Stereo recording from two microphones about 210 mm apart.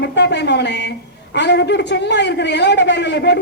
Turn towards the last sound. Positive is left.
turn(degrees=55)  # may be behind; listen again after turning